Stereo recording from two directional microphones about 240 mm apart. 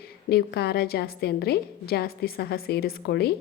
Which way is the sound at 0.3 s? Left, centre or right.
Left.